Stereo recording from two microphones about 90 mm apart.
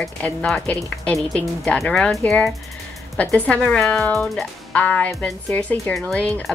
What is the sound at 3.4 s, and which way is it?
Speech, 15° left (ahead or behind).